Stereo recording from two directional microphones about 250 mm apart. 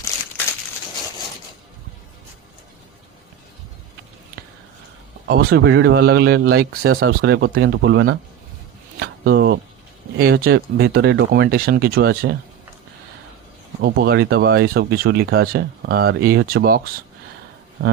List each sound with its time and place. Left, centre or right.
5.3 s speech: right
9.0 s a sound: right
10.2 s speech: right
13.8 s speech: right